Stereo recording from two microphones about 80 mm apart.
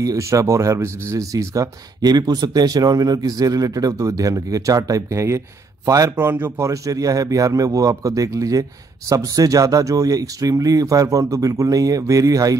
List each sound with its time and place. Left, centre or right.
0.0 s speech: right
6.1 s speech: right
6.7 s speech: right